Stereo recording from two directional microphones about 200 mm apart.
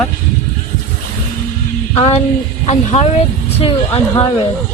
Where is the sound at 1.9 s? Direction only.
30° left (ahead or behind).